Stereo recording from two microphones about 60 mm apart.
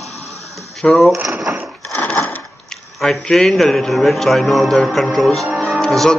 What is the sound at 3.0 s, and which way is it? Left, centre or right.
A man's voice, centre.